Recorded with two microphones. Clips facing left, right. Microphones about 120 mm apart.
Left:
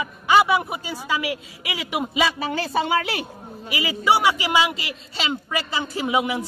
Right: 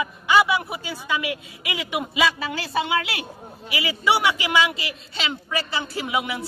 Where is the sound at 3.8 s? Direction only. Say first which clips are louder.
Left 2 dB; 40° left (ahead or behind).